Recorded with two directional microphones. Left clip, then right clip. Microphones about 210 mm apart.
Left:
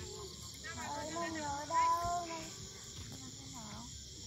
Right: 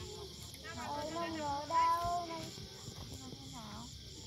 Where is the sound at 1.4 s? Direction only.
Centre (ahead or behind).